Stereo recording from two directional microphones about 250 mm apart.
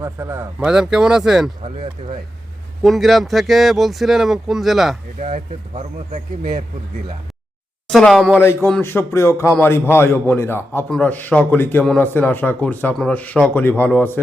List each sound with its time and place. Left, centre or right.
0.0 s speech: centre
1.6 s speech: right
2.8 s speech: centre
5.2 s speech: right
7.9 s speech: centre
8.4 s a man's voice: centre